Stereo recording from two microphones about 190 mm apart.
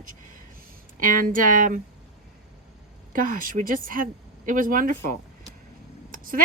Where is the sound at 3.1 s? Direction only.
45° right (ahead or behind).